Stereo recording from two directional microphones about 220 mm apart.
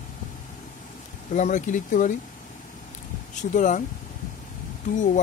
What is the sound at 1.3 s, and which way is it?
Speech, 35° left (ahead or behind).